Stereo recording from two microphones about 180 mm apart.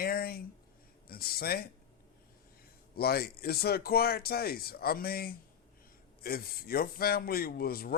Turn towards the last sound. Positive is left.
turn(degrees=55)  # may be behind; listen again after turning